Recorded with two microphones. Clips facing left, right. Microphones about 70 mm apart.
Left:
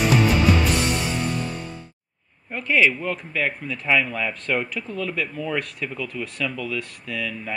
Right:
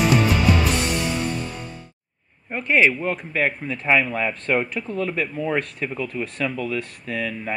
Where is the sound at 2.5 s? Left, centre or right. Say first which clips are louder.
Right 1 dB; right.